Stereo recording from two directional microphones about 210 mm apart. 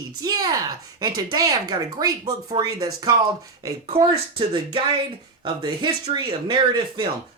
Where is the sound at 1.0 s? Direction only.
15° right (ahead or behind).